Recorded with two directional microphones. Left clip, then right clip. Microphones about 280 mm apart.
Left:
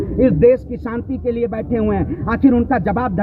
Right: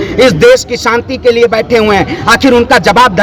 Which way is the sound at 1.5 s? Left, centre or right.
Centre.